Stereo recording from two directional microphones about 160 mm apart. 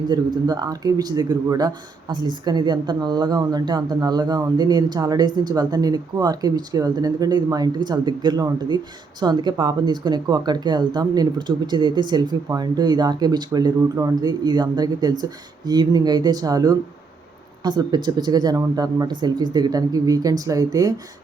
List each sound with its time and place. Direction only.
0.1 s a man's voice: 25° right (ahead or behind)